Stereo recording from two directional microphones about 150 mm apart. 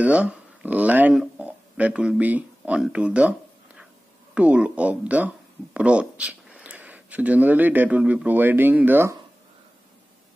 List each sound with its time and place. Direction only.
0.0 s speech: 10° right (ahead or behind)